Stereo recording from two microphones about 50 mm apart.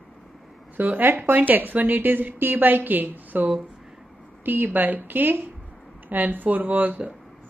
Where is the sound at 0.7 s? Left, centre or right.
Right.